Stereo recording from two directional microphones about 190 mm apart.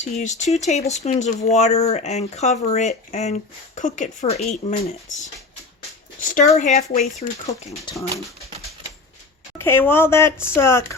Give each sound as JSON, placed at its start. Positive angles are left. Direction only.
{"t": 0.0, "sound": "speech", "side_deg": 40}
{"t": 6.2, "sound": "speech", "side_deg": 40}
{"t": 9.6, "sound": "speech", "side_deg": 10}